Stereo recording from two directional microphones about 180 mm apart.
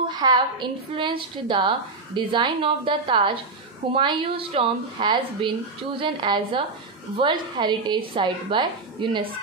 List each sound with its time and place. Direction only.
0.1 s a woman's voice: 25° right (ahead or behind)